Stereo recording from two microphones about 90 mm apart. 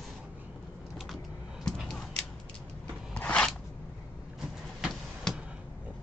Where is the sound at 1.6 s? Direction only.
5° left (ahead or behind).